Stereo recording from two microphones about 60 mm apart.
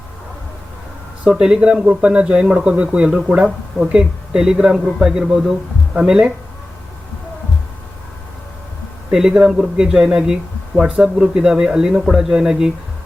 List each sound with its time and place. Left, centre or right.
1.2 s speech: centre
9.1 s speech: centre